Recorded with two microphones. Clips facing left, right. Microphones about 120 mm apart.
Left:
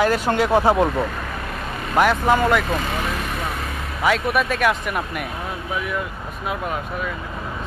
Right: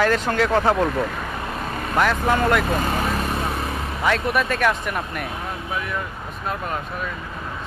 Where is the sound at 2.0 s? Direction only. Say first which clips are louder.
Left 3 dB; 10° left (ahead or behind).